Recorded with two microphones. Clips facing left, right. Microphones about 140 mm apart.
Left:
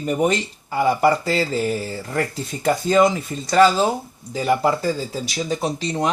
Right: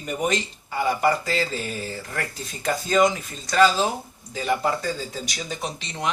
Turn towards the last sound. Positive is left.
turn(degrees=35)  # may be behind; listen again after turning